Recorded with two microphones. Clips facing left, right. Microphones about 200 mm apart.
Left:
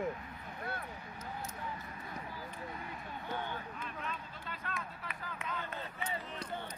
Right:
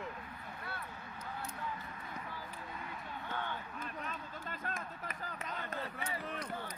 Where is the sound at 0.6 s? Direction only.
45° left (ahead or behind).